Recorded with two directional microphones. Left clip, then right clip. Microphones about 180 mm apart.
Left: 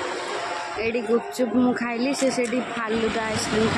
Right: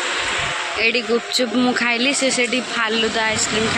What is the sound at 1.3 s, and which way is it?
Speech, 5° left (ahead or behind).